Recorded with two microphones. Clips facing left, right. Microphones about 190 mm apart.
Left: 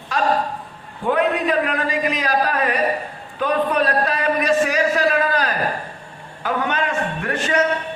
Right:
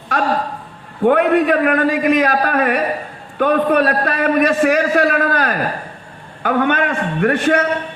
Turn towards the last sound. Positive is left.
turn(degrees=-55)  # may be behind; listen again after turning